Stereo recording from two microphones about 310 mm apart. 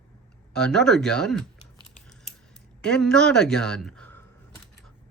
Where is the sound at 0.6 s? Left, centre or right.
Centre.